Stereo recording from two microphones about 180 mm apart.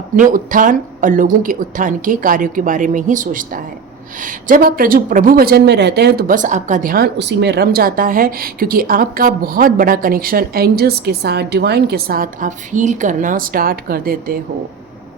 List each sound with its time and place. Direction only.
0.2 s speech: 50° right (ahead or behind)